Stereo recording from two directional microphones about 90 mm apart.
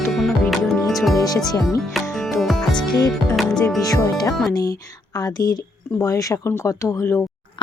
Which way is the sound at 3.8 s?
45° left (ahead or behind).